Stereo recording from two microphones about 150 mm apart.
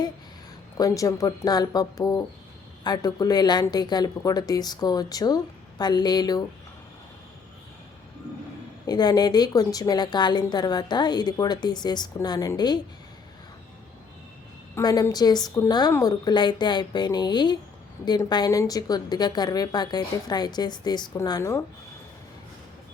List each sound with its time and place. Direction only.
0.8 s a woman's voice: 20° left (ahead or behind)
8.9 s a woman's voice: 25° left (ahead or behind)
14.8 s a woman's voice: 25° left (ahead or behind)